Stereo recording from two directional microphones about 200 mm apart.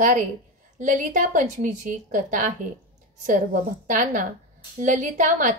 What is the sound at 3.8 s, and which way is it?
A woman's voice, 40° right (ahead or behind).